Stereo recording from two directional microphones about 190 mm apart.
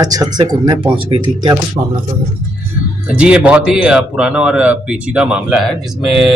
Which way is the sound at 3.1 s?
5° right (ahead or behind).